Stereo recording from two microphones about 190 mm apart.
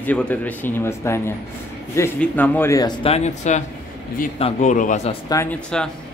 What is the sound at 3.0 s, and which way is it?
Speech, 35° left (ahead or behind).